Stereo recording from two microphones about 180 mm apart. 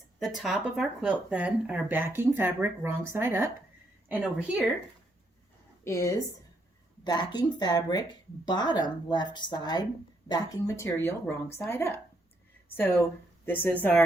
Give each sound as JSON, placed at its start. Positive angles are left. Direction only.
{"t": 0.2, "sound": "speech", "side_deg": 0}
{"t": 5.8, "sound": "a woman's voice", "side_deg": 15}